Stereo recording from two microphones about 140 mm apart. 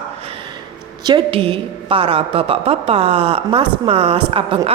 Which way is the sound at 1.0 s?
40° right (ahead or behind).